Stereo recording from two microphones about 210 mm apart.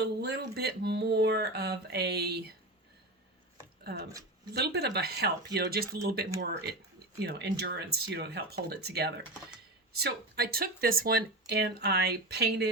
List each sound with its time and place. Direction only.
0.0 s speech: 50° right (ahead or behind)
4.5 s speech: 50° right (ahead or behind)